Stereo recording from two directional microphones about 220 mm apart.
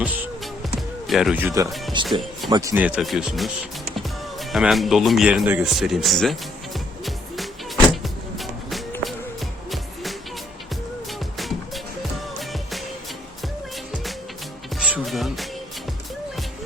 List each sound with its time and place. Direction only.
0.8 s speech: centre (ahead or behind)
6.7 s music: centre (ahead or behind)
11.3 s music: centre (ahead or behind)
14.8 s music: 5° right (ahead or behind)